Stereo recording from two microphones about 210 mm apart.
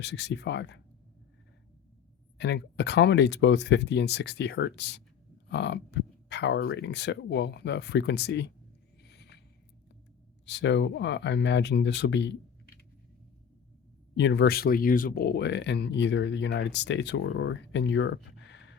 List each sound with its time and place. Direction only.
0.0 s speech: 55° left (ahead or behind)
2.4 s speech: 55° left (ahead or behind)
9.0 s a sound: 50° left (ahead or behind)
10.4 s speech: 55° left (ahead or behind)
14.2 s speech: 55° left (ahead or behind)